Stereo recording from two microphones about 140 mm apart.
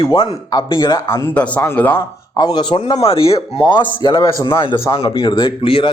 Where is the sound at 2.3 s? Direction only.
30° left (ahead or behind).